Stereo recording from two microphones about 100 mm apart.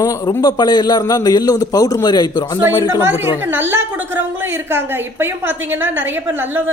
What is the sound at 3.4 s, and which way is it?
A woman's voice, 20° right (ahead or behind).